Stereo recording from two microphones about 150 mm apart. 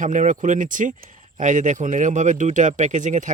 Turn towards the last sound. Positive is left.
turn(degrees=-55)  # may be behind; listen again after turning